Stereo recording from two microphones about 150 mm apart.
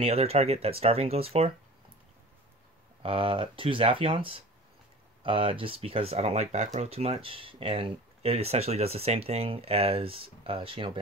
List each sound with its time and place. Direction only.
0.0 s speech: 40° right (ahead or behind)
3.0 s speech: 35° right (ahead or behind)